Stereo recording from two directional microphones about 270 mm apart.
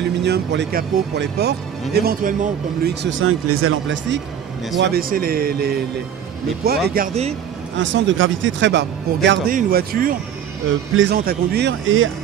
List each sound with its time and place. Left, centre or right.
0.0 s speech: right
6.9 s speech: right
7.7 s a man's voice: right